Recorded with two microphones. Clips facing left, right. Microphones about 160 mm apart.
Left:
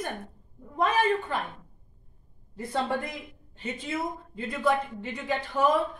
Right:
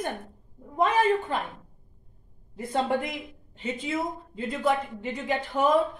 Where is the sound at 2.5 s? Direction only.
20° right (ahead or behind).